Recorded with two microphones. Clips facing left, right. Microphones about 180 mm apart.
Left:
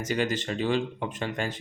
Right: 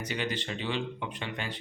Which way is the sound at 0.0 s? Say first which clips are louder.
Left 6 dB; 45° left (ahead or behind).